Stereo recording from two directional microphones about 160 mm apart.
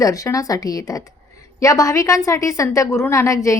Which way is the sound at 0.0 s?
20° left (ahead or behind).